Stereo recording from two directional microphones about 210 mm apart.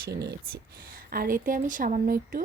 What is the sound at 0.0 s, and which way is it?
A woman's voice, 50° right (ahead or behind).